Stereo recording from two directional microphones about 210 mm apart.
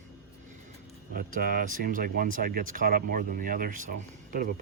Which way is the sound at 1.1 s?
45° right (ahead or behind).